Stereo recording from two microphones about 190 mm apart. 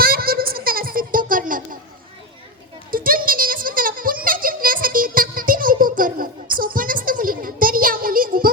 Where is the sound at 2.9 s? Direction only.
50° right (ahead or behind).